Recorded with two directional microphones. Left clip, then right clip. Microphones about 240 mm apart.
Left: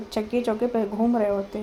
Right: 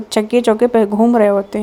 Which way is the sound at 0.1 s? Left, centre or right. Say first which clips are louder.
Right 12 dB; right.